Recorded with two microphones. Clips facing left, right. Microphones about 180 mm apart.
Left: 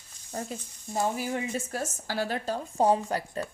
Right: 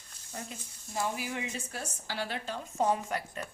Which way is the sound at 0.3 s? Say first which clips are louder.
Left 7 dB; 40° left (ahead or behind).